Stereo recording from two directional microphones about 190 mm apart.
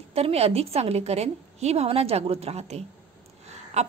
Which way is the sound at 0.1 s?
30° right (ahead or behind).